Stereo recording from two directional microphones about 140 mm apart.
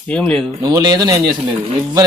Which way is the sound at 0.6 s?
25° right (ahead or behind).